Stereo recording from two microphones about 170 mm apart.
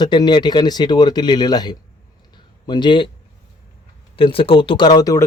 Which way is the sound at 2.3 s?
25° left (ahead or behind).